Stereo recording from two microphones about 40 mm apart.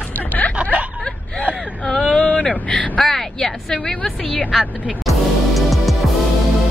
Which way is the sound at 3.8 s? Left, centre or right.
Centre.